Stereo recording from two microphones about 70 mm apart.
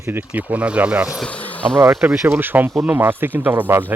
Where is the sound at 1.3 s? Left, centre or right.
Left.